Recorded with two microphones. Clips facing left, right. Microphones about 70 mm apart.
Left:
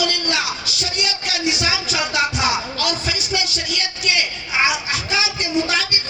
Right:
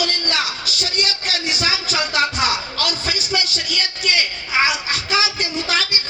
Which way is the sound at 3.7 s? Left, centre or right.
Right.